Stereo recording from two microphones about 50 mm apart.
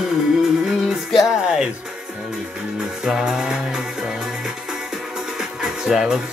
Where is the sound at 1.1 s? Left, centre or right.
Centre.